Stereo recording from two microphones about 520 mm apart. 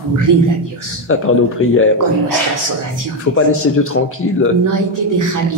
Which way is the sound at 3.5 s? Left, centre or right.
Left.